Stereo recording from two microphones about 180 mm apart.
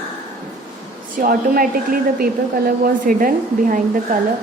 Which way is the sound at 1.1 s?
55° right (ahead or behind).